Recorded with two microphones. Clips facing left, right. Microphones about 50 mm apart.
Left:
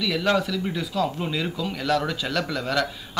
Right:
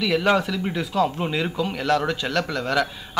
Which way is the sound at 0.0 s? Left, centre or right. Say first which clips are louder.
Right 3 dB; centre.